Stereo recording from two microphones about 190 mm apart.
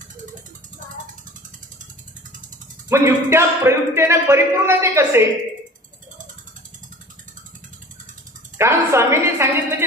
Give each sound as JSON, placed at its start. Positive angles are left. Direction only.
{"t": 2.9, "sound": "speech", "side_deg": -15}
{"t": 8.5, "sound": "speech", "side_deg": -15}